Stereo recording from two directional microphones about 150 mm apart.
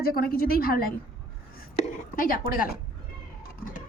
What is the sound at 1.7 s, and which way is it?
Speech, 70° left (ahead or behind).